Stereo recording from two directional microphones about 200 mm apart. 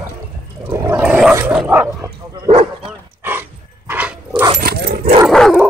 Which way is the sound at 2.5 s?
30° right (ahead or behind).